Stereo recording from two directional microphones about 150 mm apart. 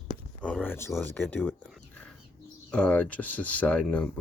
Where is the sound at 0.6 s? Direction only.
15° left (ahead or behind).